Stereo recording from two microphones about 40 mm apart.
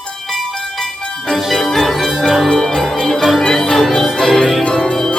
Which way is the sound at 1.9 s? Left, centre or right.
Centre.